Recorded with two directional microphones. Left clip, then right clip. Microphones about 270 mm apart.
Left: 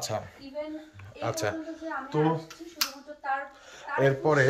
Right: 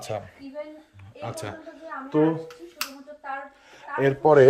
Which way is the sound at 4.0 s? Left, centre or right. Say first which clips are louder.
Right 7 dB; right.